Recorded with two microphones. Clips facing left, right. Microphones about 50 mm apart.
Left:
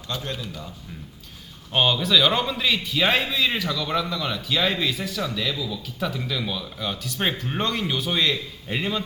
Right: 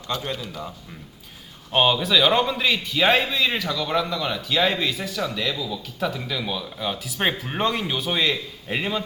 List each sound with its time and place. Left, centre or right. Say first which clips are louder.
1.7 s a man's voice: right 1 dB; centre